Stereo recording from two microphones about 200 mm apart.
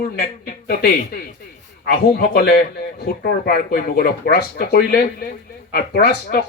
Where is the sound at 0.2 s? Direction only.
50° left (ahead or behind).